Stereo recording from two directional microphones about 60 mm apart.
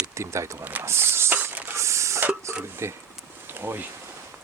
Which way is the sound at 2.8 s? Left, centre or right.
Right.